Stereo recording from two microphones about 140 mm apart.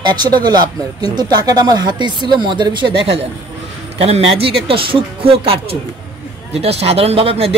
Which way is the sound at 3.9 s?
50° right (ahead or behind).